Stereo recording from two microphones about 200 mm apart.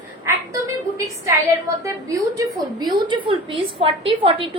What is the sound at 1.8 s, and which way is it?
A woman's voice, 15° right (ahead or behind).